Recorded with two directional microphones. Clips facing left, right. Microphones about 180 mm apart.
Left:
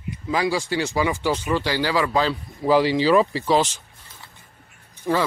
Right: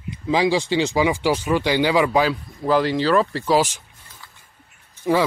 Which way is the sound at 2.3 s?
5° left (ahead or behind).